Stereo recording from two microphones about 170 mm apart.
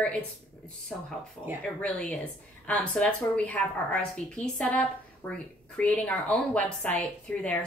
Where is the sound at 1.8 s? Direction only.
5° left (ahead or behind).